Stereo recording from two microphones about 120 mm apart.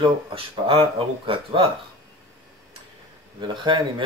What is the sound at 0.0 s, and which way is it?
Speech, 50° right (ahead or behind).